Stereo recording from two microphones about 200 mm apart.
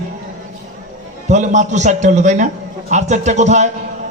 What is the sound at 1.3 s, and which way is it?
A man's voice, 35° right (ahead or behind).